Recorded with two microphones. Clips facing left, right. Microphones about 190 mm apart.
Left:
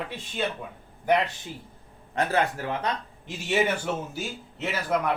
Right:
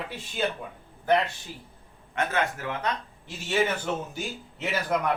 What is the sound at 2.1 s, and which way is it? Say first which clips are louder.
Speech: left 3 dB; 35° left (ahead or behind).